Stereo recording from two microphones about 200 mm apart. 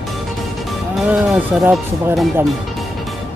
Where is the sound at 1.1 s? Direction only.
5° right (ahead or behind).